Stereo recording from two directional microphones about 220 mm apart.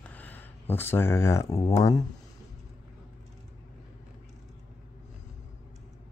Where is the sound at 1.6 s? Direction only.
15° left (ahead or behind).